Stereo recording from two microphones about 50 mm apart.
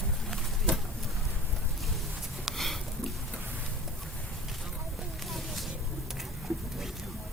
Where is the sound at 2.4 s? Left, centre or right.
Centre.